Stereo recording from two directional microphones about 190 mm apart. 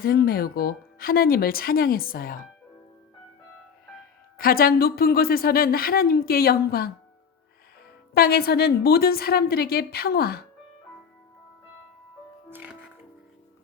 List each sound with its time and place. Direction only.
0.0 s speech: 50° left (ahead or behind)
4.4 s speech: 50° left (ahead or behind)
8.1 s speech: 55° left (ahead or behind)
12.5 s music: 10° right (ahead or behind)